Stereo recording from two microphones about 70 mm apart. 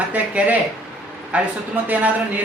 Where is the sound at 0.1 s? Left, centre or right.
Right.